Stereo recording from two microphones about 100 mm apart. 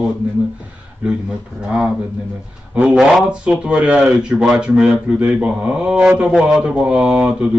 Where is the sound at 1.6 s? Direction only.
5° right (ahead or behind).